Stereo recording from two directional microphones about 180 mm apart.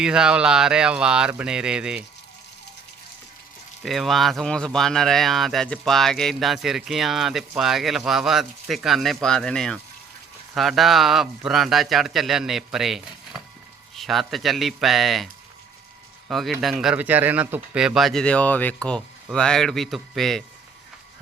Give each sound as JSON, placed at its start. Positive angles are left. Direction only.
{"t": 0.0, "sound": "speech", "side_deg": -5}
{"t": 3.8, "sound": "speech", "side_deg": 0}
{"t": 16.3, "sound": "speech", "side_deg": 0}